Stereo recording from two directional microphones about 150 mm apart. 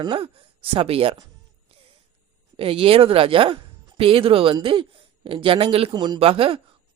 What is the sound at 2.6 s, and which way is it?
Speech, 40° right (ahead or behind).